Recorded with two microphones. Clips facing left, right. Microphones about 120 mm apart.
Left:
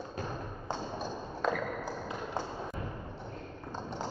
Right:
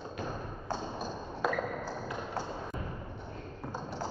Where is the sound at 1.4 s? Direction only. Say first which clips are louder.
Left 1 dB; 5° right (ahead or behind).